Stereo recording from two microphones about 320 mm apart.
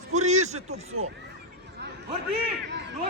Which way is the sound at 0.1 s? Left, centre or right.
Right.